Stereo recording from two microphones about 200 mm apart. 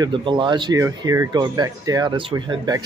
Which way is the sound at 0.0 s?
25° right (ahead or behind).